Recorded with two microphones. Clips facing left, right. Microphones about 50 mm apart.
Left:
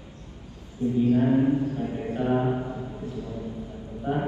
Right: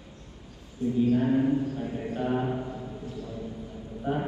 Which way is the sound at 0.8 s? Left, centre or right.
Left.